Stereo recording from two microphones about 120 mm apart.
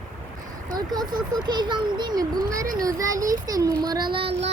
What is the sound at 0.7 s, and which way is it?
A child's voice, 35° right (ahead or behind).